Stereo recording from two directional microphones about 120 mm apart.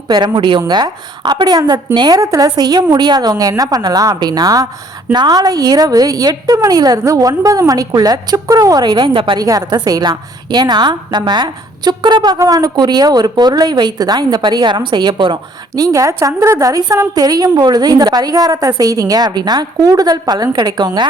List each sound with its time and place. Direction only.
0.1 s a woman's voice: 40° right (ahead or behind)
9.4 s a woman's voice: 30° right (ahead or behind)